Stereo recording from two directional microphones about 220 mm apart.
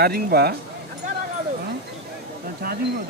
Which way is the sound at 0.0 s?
45° right (ahead or behind).